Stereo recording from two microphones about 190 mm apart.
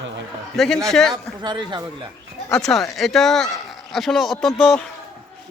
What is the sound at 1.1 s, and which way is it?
Speech, 25° right (ahead or behind).